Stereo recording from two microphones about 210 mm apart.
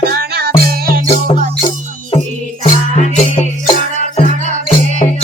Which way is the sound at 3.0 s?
35° left (ahead or behind).